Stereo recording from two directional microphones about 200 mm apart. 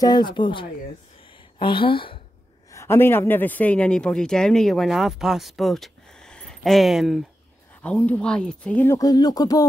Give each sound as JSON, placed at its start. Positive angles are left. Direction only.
{"t": 0.0, "sound": "speech", "side_deg": 20}
{"t": 2.7, "sound": "speech", "side_deg": 15}